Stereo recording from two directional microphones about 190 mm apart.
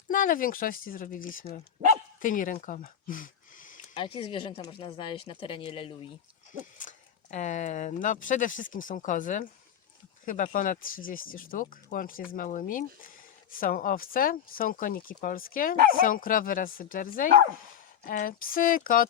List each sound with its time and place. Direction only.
0.1 s speech: 45° left (ahead or behind)
3.9 s speech: 25° left (ahead or behind)
6.7 s speech: 40° left (ahead or behind)